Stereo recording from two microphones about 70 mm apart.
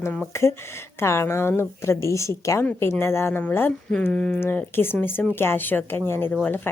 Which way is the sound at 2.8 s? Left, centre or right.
Left.